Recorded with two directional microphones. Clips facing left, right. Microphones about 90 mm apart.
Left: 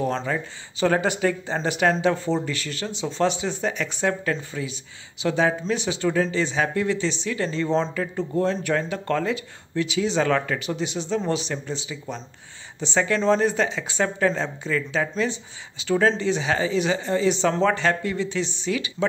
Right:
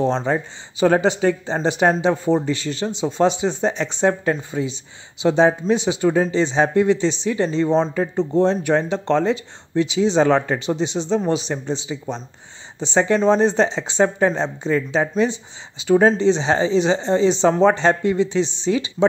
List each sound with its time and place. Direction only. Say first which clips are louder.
0.0 s speech: right 5 dB; 25° right (ahead or behind)